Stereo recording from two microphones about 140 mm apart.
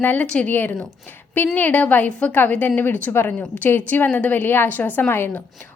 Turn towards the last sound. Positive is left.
turn(degrees=15)  # may be behind; listen again after turning